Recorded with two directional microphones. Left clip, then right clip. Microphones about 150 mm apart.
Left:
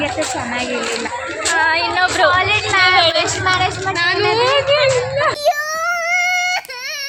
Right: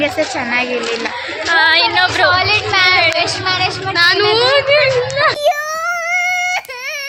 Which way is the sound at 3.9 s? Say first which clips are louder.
Right 5 dB; 25° right (ahead or behind).